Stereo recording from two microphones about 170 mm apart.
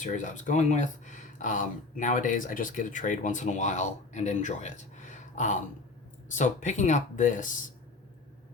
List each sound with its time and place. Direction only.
0.0 s speech: 45° left (ahead or behind)